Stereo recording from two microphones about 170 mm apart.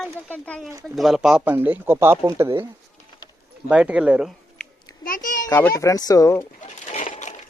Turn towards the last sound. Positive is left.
turn(degrees=50)  # may be behind; listen again after turning